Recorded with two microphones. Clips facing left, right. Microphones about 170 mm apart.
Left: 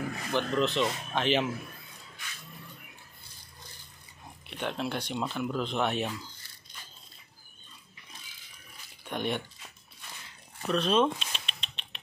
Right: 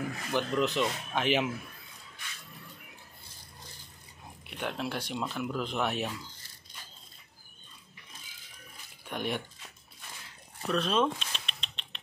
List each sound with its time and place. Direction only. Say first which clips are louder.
0.3 s speech: left 1 dB; 10° right (ahead or behind)
4.5 s speech: left 2 dB; 5° right (ahead or behind)
9.1 s speech: left 2 dB; 5° right (ahead or behind)
10.7 s a sound: left 2 dB; centre (ahead or behind)